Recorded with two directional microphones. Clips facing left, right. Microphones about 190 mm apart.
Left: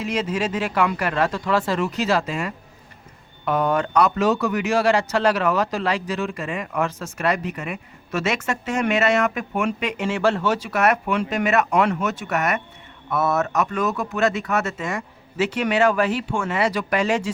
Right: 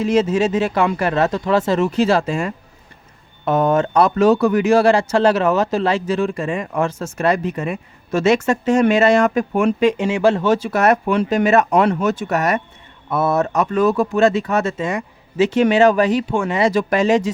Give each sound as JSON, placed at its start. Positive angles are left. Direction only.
{"t": 0.0, "sound": "speech", "side_deg": -25}
{"t": 10.0, "sound": "speech", "side_deg": -15}
{"t": 10.7, "sound": "speech", "side_deg": -35}